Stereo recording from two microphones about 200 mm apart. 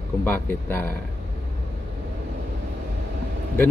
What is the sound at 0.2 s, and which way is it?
Speech, 10° left (ahead or behind).